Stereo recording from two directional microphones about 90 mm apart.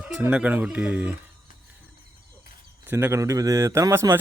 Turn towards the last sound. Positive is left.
turn(degrees=-30)  # may be behind; listen again after turning